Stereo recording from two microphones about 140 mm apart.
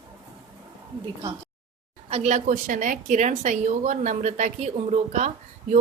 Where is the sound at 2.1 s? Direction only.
55° right (ahead or behind).